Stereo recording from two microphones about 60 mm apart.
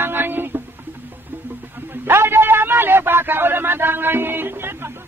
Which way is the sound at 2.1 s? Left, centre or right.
Right.